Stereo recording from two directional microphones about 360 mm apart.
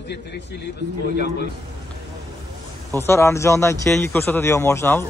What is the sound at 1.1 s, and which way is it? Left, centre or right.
Speech, left.